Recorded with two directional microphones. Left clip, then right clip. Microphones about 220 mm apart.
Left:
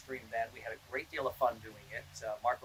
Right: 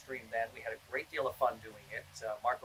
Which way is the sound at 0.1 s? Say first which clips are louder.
Right 1 dB; 10° left (ahead or behind).